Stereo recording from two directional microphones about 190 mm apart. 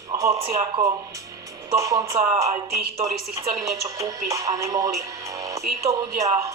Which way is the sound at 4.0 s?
15° right (ahead or behind).